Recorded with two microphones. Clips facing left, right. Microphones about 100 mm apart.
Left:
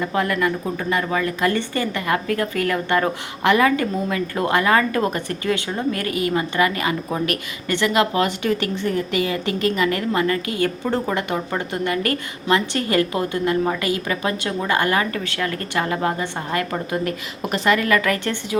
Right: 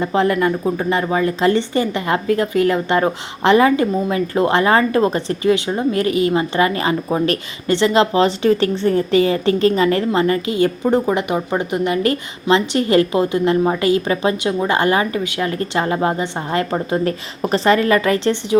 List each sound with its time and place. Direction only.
0.0 s a woman's voice: 25° right (ahead or behind)